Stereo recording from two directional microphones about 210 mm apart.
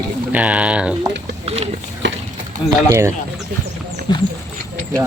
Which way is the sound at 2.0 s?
60° right (ahead or behind).